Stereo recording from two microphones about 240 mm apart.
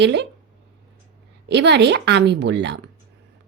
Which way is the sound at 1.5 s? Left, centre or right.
Right.